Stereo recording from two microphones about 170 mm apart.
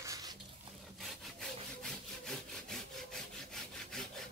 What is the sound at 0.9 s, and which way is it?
Sawing, centre (ahead or behind).